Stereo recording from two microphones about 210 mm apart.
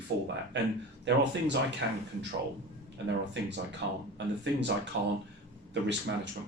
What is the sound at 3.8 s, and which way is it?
Speech, 50° right (ahead or behind).